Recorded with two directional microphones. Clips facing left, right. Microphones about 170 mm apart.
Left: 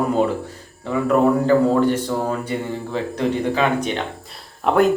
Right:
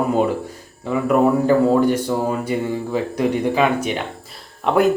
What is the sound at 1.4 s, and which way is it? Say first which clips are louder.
Speech: right 1 dB; 10° right (ahead or behind).